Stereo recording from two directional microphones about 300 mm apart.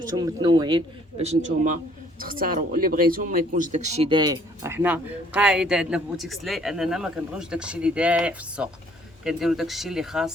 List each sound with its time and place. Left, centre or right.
0.2 s a man's voice: centre